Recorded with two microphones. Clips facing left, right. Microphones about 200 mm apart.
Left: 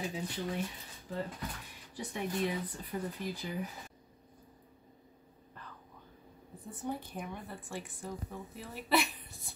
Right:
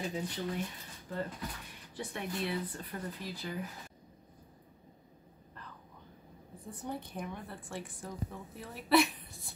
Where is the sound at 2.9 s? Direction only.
10° left (ahead or behind).